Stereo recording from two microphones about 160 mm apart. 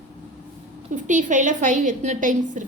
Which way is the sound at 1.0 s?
50° right (ahead or behind).